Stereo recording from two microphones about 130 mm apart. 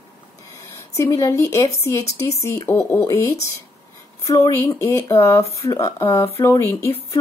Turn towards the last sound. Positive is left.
turn(degrees=20)  # may be behind; listen again after turning